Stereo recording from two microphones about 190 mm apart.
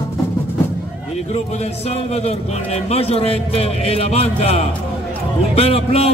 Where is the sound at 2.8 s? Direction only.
30° left (ahead or behind).